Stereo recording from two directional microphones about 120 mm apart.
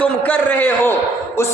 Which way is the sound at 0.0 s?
15° left (ahead or behind).